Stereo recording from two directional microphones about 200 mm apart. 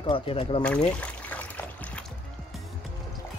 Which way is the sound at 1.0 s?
10° left (ahead or behind).